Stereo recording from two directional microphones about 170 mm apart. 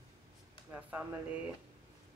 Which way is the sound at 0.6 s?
10° right (ahead or behind).